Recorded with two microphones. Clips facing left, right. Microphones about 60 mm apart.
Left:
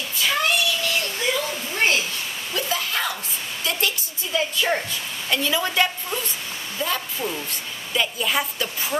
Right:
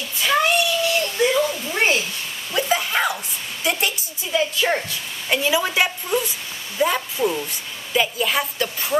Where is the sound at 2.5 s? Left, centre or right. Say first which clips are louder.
Right 5 dB; right.